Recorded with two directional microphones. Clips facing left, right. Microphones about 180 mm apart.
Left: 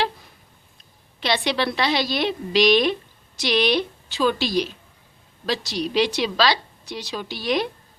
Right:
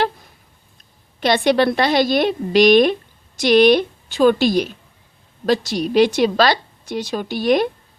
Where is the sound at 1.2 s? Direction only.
50° right (ahead or behind).